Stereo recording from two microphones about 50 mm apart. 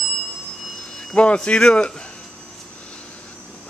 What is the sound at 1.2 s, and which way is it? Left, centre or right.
Speech, left.